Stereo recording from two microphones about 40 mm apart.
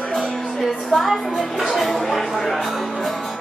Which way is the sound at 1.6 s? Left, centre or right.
Centre.